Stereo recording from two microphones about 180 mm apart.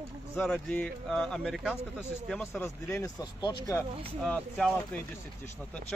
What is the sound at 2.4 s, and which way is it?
Speech, 15° left (ahead or behind).